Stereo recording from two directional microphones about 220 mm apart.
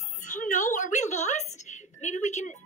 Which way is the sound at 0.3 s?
35° left (ahead or behind).